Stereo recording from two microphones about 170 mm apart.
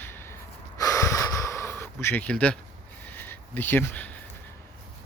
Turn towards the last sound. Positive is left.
turn(degrees=10)  # may be behind; listen again after turning